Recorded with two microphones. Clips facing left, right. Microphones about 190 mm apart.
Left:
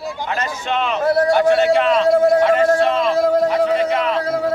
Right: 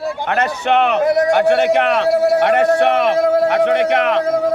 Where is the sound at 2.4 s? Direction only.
70° right (ahead or behind).